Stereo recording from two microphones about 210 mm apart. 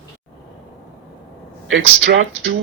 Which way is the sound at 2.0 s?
60° right (ahead or behind).